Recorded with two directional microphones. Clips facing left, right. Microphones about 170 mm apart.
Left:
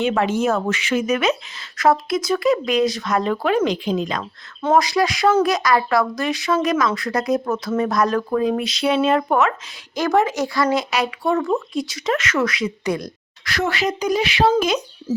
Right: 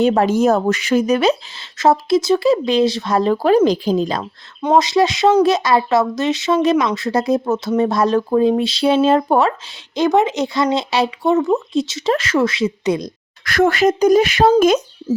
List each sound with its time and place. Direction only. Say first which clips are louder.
0.0 s speech: right 5 dB; 40° right (ahead or behind)
4.6 s speech: right 3 dB; 20° right (ahead or behind)
9.9 s speech: right 3 dB; 20° right (ahead or behind)
13.4 s speech: right 8 dB; 50° right (ahead or behind)